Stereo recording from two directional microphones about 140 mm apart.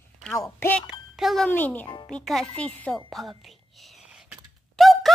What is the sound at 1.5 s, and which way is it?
Speech, 10° left (ahead or behind).